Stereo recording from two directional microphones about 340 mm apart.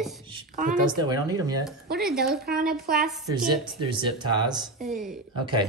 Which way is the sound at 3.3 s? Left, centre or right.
Centre.